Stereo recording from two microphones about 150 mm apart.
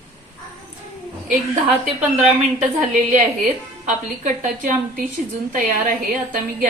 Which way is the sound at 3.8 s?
60° right (ahead or behind).